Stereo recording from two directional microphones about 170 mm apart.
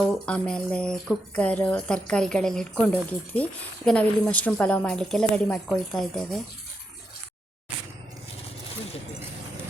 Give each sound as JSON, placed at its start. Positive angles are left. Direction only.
{"t": 0.1, "sound": "speech", "side_deg": 5}